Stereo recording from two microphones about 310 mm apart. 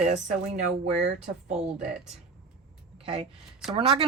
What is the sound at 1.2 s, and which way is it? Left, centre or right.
Speech, centre.